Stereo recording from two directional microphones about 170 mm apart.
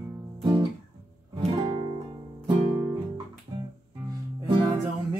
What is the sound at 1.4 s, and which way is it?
Music, 30° right (ahead or behind).